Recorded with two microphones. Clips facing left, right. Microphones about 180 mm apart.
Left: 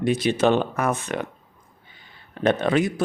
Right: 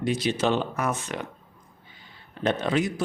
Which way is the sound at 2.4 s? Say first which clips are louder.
Left 4 dB; 55° left (ahead or behind).